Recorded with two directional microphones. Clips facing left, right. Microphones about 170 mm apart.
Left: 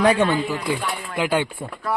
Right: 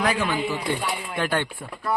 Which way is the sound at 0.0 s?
30° left (ahead or behind).